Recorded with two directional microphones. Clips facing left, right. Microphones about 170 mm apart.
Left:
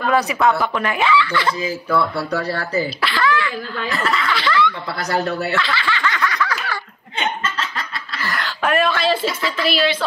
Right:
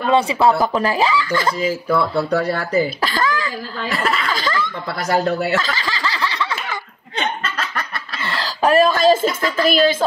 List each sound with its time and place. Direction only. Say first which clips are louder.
0.0 s speech: right 2 dB; 25° right (ahead or behind); by 1.5 s 40° right (ahead or behind)
1.6 s speech: right 2 dB; 30° right (ahead or behind)
3.0 s cough: left 1 dB; 40° right (ahead or behind)
4.3 s snicker: left 3 dB; 45° right (ahead or behind); by 6.8 s 25° right (ahead or behind)
8.2 s a sound: right 3 dB; 30° right (ahead or behind); by 10.0 s 45° right (ahead or behind)